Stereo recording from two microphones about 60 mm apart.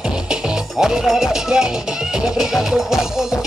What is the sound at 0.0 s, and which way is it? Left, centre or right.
Speech, centre.